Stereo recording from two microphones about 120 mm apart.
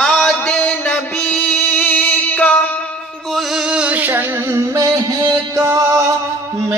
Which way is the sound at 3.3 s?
Centre (ahead or behind).